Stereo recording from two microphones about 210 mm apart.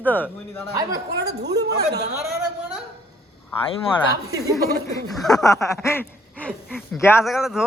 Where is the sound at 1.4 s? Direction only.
50° right (ahead or behind).